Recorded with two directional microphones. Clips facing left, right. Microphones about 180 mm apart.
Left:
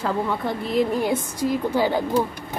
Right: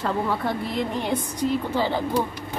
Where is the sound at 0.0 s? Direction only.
Centre (ahead or behind).